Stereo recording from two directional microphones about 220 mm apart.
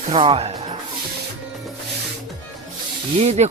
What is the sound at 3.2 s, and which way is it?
Snake, 30° right (ahead or behind).